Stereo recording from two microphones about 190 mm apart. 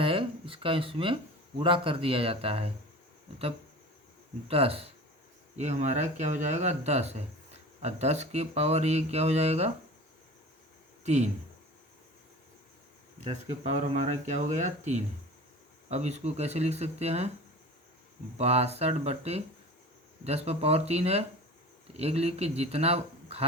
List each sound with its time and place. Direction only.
0.0 s speech: 30° right (ahead or behind)
4.4 s speech: 30° right (ahead or behind)
11.0 s speech: 35° right (ahead or behind)
13.2 s speech: 35° right (ahead or behind)
18.3 s speech: 35° right (ahead or behind)